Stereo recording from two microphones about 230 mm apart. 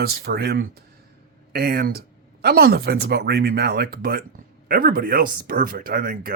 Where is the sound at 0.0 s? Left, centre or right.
Right.